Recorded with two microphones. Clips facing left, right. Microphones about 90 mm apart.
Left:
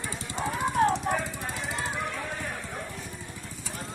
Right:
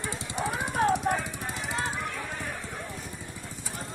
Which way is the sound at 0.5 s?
10° right (ahead or behind).